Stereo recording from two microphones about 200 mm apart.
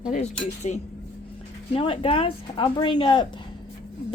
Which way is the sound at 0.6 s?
35° left (ahead or behind).